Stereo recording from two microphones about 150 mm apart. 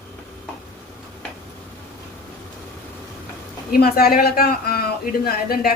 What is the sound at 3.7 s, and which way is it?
A man's voice, 90° left.